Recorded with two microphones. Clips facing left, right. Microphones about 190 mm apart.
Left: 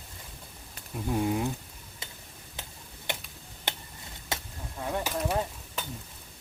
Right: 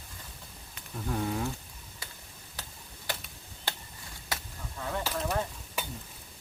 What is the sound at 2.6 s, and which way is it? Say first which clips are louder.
Tick-tock: left 1 dB; 25° left (ahead or behind).